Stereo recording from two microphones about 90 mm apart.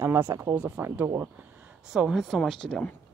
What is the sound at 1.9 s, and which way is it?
Speech, 5° right (ahead or behind).